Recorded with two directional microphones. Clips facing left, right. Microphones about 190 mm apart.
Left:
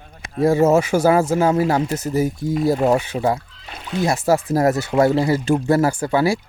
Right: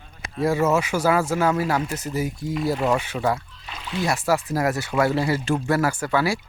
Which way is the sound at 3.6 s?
55° left (ahead or behind).